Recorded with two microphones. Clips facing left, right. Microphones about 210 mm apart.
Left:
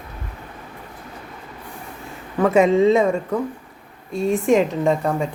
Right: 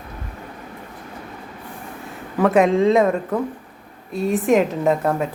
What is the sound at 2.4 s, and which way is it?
A man's voice, centre (ahead or behind).